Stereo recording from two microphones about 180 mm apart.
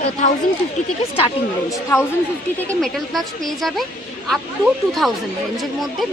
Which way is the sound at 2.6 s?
Centre (ahead or behind).